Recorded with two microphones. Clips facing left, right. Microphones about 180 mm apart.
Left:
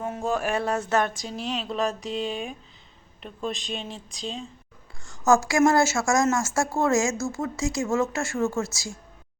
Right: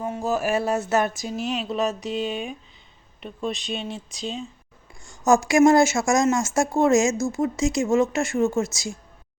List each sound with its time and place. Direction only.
0.0 s speech: centre (ahead or behind)
5.0 s speech: 15° right (ahead or behind)